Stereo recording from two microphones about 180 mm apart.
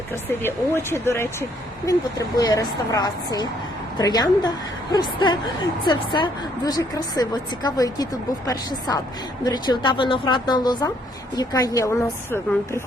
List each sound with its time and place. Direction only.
0.3 s a woman's voice: 15° left (ahead or behind)